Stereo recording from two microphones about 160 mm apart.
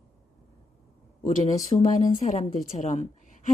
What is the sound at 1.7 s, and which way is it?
Speech, 25° left (ahead or behind).